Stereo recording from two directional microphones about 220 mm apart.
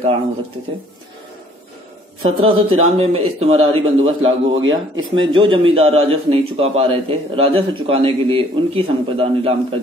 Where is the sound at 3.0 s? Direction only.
30° right (ahead or behind).